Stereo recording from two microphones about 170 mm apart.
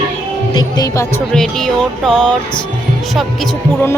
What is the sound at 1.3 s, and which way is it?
Speech, 5° left (ahead or behind).